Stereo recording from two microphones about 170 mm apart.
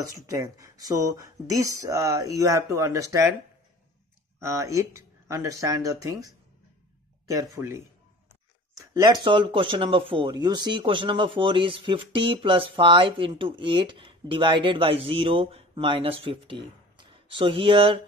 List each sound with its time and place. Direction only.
0.0 s speech: 20° right (ahead or behind)
4.4 s speech: 15° right (ahead or behind)
7.5 s speech: 15° right (ahead or behind)